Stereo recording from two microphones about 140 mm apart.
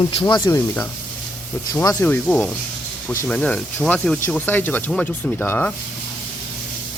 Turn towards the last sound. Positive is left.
turn(degrees=10)  # may be behind; listen again after turning